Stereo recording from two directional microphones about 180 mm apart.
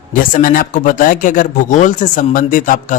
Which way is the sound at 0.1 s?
50° left (ahead or behind).